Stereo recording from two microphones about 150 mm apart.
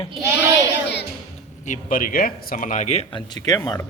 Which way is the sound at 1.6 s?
65° left (ahead or behind).